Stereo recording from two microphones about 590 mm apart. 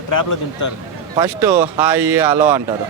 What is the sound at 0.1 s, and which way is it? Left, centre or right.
Speech, left.